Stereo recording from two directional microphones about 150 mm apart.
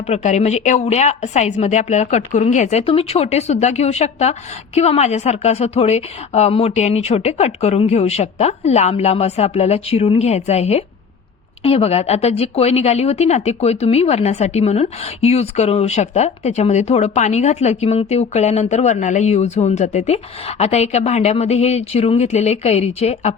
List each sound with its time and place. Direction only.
0.1 s a woman's voice: 50° left (ahead or behind)